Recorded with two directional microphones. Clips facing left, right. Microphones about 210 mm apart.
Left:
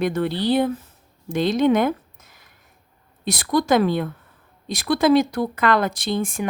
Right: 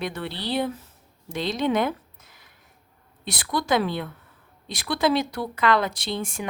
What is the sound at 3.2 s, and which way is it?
Speech, 45° left (ahead or behind).